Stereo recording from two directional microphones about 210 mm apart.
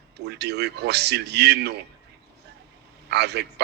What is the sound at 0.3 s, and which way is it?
A man's voice, 50° right (ahead or behind).